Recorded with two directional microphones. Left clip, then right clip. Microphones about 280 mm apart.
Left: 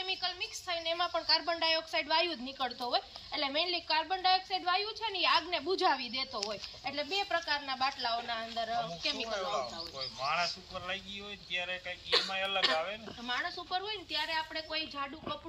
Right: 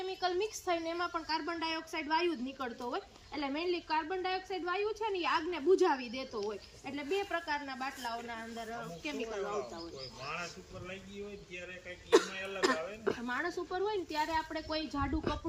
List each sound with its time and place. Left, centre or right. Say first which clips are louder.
0.0 s speech: right 1 dB; right
0.9 s speech: left 5 dB; centre
10.0 s a man's voice: left 10 dB; centre
12.1 s speech: right 1 dB; right